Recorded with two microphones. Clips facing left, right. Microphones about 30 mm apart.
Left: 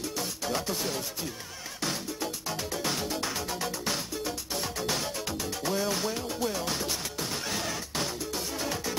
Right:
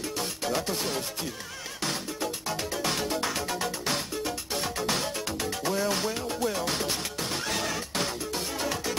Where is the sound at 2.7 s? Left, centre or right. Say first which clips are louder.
Right 2 dB; centre.